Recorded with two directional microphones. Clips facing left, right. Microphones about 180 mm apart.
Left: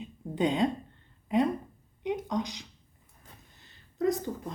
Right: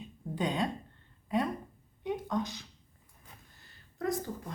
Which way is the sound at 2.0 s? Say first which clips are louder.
Left 2 dB; 15° left (ahead or behind).